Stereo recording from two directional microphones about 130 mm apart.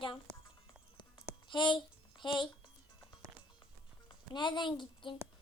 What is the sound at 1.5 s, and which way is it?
A child's voice, 35° left (ahead or behind).